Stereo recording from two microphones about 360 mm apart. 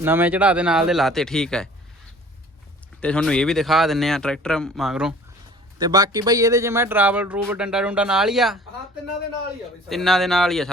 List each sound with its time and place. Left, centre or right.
0.0 s speech: centre
3.0 s speech: centre
9.9 s speech: centre